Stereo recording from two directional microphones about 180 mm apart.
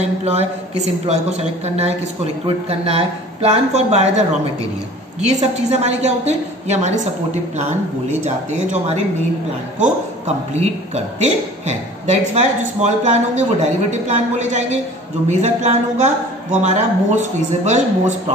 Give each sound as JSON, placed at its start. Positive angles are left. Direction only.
{"t": 0.0, "sound": "a woman's voice", "side_deg": -35}
{"t": 5.2, "sound": "a woman's voice", "side_deg": -40}
{"t": 8.5, "sound": "a woman's voice", "side_deg": -40}